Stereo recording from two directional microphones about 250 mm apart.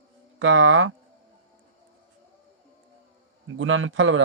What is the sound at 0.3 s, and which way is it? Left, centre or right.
Speech, right.